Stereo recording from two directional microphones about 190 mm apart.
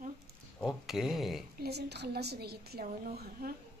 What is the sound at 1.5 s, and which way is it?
A woman's voice, 60° right (ahead or behind).